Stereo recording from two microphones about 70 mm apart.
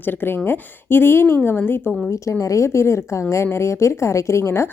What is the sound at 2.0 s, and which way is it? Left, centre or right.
A woman's voice, left.